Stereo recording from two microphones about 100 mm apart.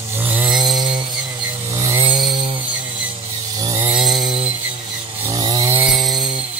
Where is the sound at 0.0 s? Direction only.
20° right (ahead or behind).